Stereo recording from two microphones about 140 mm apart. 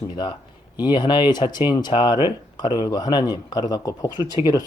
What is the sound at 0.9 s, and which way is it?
Speech, 30° left (ahead or behind).